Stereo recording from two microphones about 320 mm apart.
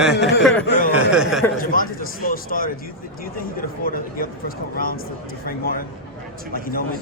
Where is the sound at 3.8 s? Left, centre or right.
Left.